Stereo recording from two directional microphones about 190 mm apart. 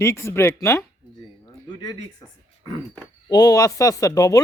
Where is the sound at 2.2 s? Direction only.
20° left (ahead or behind).